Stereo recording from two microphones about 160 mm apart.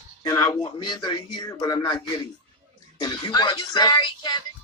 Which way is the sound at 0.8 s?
30° left (ahead or behind).